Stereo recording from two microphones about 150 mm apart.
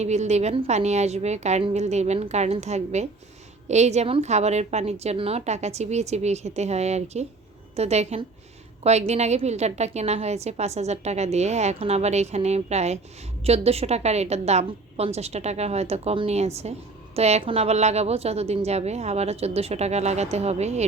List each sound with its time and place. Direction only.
0.0 s a woman's voice: 50° right (ahead or behind)